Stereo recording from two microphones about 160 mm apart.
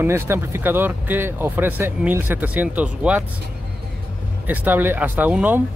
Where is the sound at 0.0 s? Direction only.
15° right (ahead or behind).